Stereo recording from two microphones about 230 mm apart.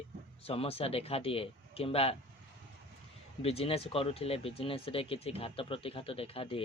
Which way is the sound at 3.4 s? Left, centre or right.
Left.